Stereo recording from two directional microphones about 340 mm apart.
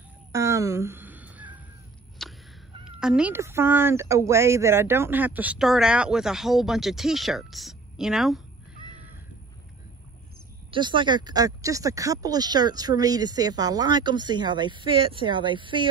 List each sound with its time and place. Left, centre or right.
0.3 s a sound: centre
2.8 s speech: centre
10.7 s speech: centre